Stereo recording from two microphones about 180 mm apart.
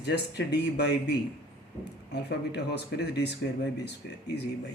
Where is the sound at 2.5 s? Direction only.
65° left (ahead or behind).